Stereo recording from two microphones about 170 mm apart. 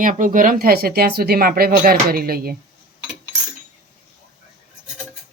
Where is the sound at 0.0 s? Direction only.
50° right (ahead or behind).